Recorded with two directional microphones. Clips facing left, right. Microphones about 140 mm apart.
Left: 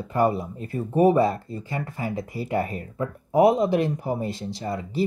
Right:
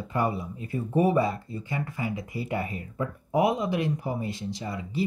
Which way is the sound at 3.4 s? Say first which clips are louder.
Left 7 dB; 30° left (ahead or behind).